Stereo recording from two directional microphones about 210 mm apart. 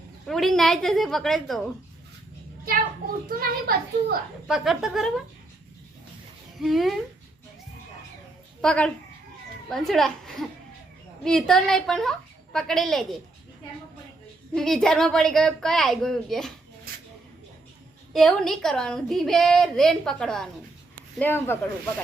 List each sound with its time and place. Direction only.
0.3 s a woman's voice: centre (ahead or behind)
2.6 s a child's voice: 45° right (ahead or behind)
4.4 s a woman's voice: centre (ahead or behind)
6.6 s a woman's voice: centre (ahead or behind)
8.6 s a woman's voice: 5° left (ahead or behind)
14.5 s a woman's voice: centre (ahead or behind)
18.1 s a woman's voice: centre (ahead or behind)